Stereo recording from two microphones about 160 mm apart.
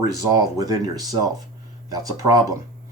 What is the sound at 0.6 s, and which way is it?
Speech, 25° right (ahead or behind).